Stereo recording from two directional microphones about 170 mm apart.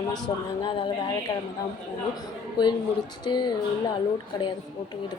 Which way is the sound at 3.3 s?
25° left (ahead or behind).